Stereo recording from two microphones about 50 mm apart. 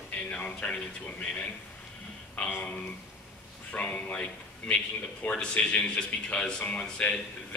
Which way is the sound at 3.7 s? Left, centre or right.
Left.